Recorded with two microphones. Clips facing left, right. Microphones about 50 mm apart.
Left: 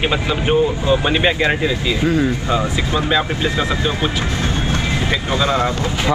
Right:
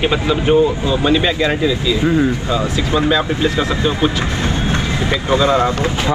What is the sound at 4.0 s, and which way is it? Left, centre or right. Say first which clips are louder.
Speech: right 3 dB; right.